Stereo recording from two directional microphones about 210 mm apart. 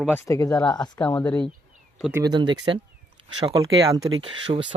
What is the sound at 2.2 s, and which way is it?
Speech, 20° right (ahead or behind).